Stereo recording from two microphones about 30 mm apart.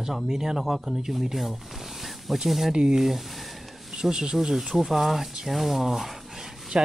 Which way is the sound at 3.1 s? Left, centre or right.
Centre.